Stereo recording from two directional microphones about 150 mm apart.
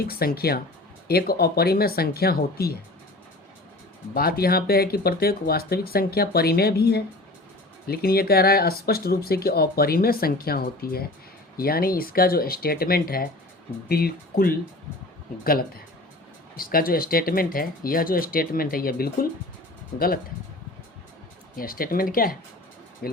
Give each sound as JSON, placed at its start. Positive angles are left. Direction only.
{"t": 0.1, "sound": "speech", "side_deg": 90}
{"t": 4.1, "sound": "speech", "side_deg": 90}
{"t": 13.8, "sound": "speech", "side_deg": 90}
{"t": 16.6, "sound": "speech", "side_deg": 75}
{"t": 21.5, "sound": "speech", "side_deg": 75}